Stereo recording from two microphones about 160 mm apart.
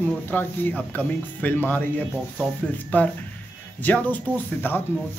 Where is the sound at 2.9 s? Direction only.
10° left (ahead or behind).